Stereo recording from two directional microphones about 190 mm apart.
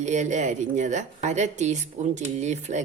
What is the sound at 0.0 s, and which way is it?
A woman's voice, 40° right (ahead or behind).